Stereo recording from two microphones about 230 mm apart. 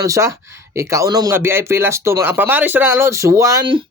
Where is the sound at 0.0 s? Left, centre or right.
Centre.